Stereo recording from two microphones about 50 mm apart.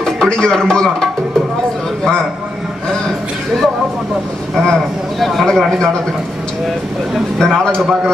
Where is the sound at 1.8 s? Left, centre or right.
Centre.